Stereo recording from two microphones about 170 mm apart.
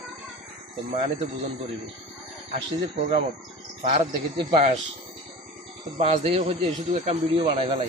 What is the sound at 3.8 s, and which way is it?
Speech, 35° right (ahead or behind).